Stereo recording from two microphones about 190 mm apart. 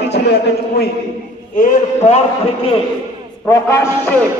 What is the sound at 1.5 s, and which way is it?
A man's voice, 40° left (ahead or behind).